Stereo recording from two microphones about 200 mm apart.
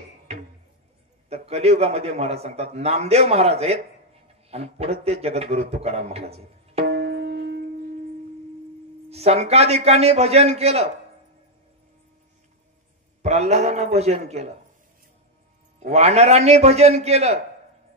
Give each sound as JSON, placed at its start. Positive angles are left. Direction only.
{"t": 0.3, "sound": "a sound", "side_deg": -30}
{"t": 1.3, "sound": "a man's voice", "side_deg": -30}
{"t": 6.9, "sound": "music", "side_deg": -55}
{"t": 9.1, "sound": "a man's voice", "side_deg": -30}
{"t": 13.2, "sound": "a man's voice", "side_deg": -35}
{"t": 15.9, "sound": "a man's voice", "side_deg": -30}